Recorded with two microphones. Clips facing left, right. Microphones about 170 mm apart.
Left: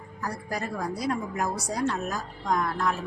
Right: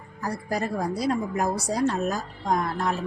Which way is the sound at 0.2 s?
35° right (ahead or behind).